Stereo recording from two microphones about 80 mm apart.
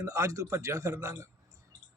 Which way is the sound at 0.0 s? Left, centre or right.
Right.